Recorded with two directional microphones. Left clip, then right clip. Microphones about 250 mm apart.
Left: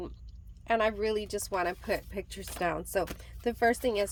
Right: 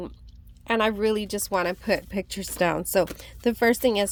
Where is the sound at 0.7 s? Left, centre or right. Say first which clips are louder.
Right 5 dB; right.